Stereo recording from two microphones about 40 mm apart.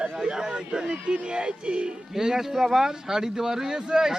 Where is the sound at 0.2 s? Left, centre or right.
Centre.